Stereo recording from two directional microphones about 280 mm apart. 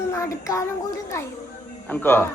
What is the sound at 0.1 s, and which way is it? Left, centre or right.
Child singing, centre.